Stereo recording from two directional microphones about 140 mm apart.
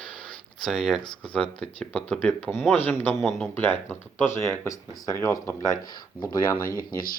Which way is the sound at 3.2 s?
Centre (ahead or behind).